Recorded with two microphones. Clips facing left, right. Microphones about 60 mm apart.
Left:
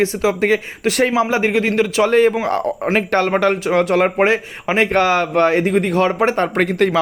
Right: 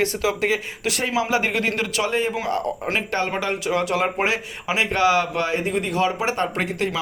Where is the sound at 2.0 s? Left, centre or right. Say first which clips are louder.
Left 10 dB; left.